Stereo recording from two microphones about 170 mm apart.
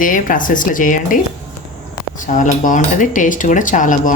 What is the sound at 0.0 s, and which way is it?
Speech, 50° left (ahead or behind).